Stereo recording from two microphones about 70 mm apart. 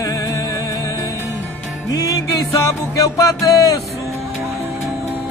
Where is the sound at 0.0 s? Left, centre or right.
Left.